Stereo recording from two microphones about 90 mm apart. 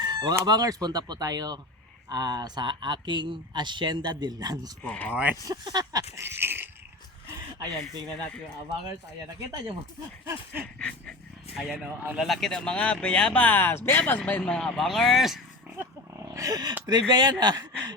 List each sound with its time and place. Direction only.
0.0 s chicken: 50° right (ahead or behind)
0.4 s speech: 45° right (ahead or behind)
4.8 s speech: 15° left (ahead or behind)
5.1 s speech: 20° right (ahead or behind)
5.5 s speech: 45° right (ahead or behind)
6.2 s dog: 25° right (ahead or behind)
10.8 s speech: 10° left (ahead or behind)
11.5 s speech: centre (ahead or behind)
16.3 s speech: 40° right (ahead or behind)